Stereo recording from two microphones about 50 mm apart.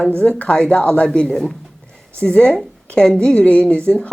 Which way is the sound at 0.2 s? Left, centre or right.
Left.